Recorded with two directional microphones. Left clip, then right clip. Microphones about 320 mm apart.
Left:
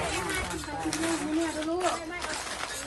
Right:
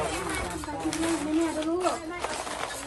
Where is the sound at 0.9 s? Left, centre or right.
Centre.